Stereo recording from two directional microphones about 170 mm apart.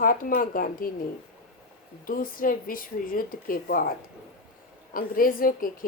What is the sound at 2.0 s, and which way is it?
A woman's voice, 55° left (ahead or behind).